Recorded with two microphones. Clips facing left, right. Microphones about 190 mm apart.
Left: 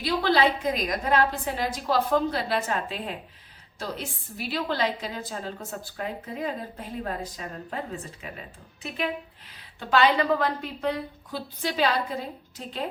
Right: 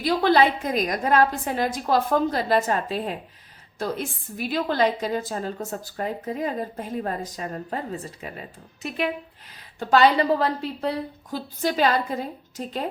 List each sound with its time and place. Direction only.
0.0 s a woman's voice: 50° right (ahead or behind)